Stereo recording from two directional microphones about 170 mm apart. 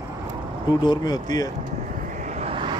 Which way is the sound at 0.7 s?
25° left (ahead or behind).